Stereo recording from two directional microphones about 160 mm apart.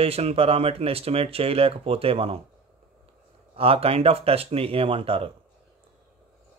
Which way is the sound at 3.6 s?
35° right (ahead or behind).